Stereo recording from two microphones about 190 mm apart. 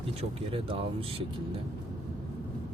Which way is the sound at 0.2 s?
30° right (ahead or behind).